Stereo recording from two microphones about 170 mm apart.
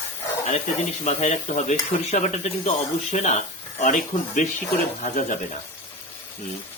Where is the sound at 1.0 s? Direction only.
45° left (ahead or behind).